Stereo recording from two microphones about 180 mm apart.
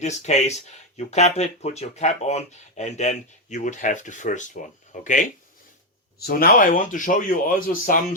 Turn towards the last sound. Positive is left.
turn(degrees=50)  # may be behind; listen again after turning